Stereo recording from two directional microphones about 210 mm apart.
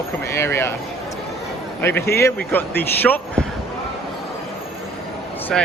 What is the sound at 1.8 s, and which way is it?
Speech, 10° left (ahead or behind).